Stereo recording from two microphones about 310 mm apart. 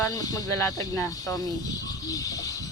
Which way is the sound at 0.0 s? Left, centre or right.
Centre.